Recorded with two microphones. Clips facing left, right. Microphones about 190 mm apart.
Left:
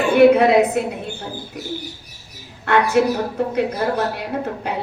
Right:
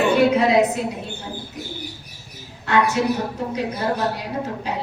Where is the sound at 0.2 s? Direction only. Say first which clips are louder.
Left 9 dB; 55° left (ahead or behind).